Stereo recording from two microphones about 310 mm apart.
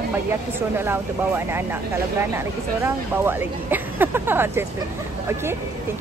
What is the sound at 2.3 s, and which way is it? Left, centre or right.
Speech, centre.